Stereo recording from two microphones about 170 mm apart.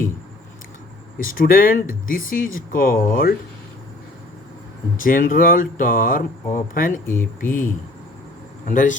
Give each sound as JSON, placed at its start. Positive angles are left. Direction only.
{"t": 1.2, "sound": "speech", "side_deg": 55}
{"t": 5.0, "sound": "speech", "side_deg": 55}
{"t": 7.0, "sound": "speech", "side_deg": 15}
{"t": 7.4, "sound": "a man's voice", "side_deg": 50}